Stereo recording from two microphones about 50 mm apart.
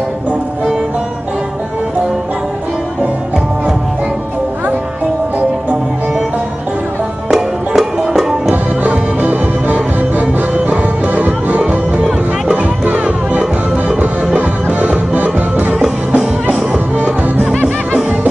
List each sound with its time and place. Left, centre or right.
7.2 s music: centre
9.2 s music: right
16.9 s music: right